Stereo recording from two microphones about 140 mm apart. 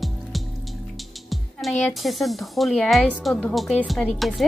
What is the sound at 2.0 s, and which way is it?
Speech, centre (ahead or behind).